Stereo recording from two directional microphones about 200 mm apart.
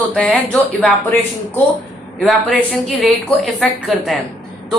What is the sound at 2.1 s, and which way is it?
A woman's voice, centre (ahead or behind).